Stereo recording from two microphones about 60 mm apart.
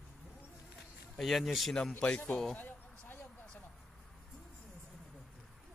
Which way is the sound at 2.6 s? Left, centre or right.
Left.